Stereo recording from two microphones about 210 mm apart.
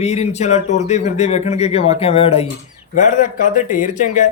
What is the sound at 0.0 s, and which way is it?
A man's voice, 30° left (ahead or behind).